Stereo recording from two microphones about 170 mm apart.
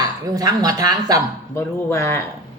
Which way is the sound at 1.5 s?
15° left (ahead or behind).